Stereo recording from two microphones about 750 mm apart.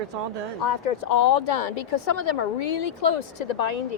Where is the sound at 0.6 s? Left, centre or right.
Left.